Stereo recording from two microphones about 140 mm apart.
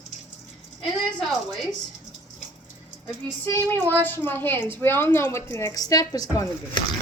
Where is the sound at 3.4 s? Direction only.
15° left (ahead or behind).